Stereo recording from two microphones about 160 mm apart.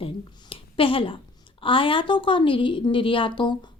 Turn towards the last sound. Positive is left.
turn(degrees=30)  # may be behind; listen again after turning